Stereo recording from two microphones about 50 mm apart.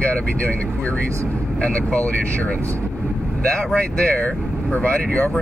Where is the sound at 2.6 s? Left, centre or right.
Right.